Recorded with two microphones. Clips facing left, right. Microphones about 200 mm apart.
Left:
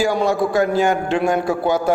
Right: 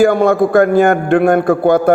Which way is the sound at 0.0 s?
55° right (ahead or behind).